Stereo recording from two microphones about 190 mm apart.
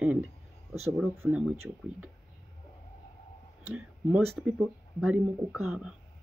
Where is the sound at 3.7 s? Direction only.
5° right (ahead or behind).